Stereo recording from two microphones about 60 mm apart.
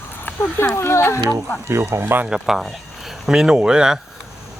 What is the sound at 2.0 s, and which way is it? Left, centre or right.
Speech, right.